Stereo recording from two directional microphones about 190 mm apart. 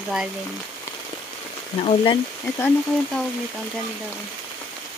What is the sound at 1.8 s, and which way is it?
Speech, 25° left (ahead or behind).